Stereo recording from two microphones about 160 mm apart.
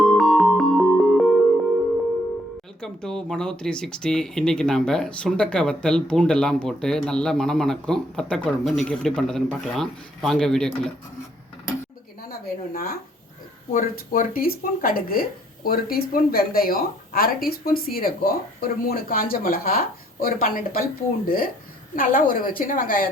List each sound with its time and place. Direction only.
0.0 s music: centre (ahead or behind)
2.8 s speech: 5° left (ahead or behind)
12.3 s speech: 70° left (ahead or behind)